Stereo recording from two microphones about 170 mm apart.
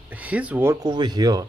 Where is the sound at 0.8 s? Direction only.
25° right (ahead or behind).